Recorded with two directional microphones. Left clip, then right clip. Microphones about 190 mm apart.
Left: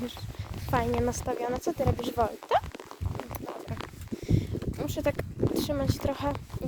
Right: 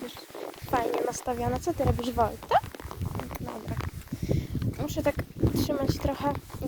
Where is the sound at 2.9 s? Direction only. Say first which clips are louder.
Right 2 dB; 45° right (ahead or behind).